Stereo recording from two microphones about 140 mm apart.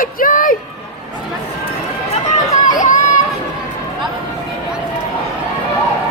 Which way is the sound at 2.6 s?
65° left (ahead or behind).